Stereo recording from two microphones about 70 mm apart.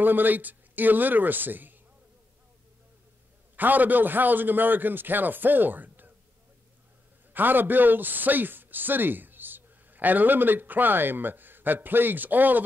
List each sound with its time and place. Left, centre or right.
0.0 s a man's voice: right
3.5 s a man's voice: right
7.3 s a man's voice: right